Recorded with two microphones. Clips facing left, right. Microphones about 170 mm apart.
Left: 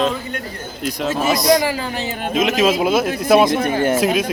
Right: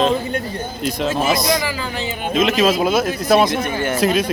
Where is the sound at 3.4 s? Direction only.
50° left (ahead or behind).